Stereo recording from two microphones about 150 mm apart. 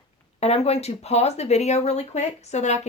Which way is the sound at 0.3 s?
45° left (ahead or behind).